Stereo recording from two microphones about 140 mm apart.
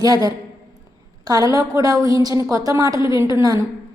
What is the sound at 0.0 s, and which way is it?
A woman's voice, 30° right (ahead or behind).